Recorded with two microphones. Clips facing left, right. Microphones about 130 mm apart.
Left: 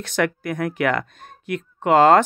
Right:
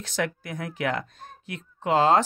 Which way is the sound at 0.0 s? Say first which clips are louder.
Left 7 dB; 65° left (ahead or behind).